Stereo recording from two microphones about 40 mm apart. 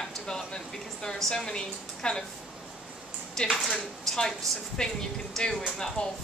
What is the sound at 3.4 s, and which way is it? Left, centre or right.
Speech, centre.